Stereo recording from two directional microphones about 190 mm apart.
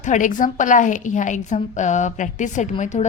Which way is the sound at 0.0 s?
40° left (ahead or behind).